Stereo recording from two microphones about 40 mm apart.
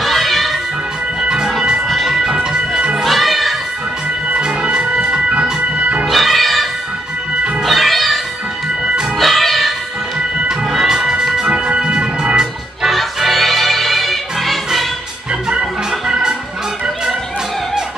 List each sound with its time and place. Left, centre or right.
0.0 s music: centre
1.9 s music: centre
2.1 s music: centre
3.0 s children playing: centre
4.4 s music: right
6.0 s music: centre
9.2 s music: centre
10.9 s music: centre
12.8 s music: centre
16.1 s music: centre